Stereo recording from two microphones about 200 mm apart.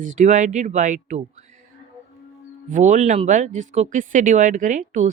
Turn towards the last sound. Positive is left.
turn(degrees=-40)  # may be behind; listen again after turning